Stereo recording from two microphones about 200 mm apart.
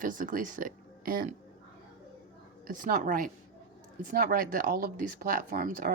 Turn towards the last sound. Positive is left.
turn(degrees=-45)  # may be behind; listen again after turning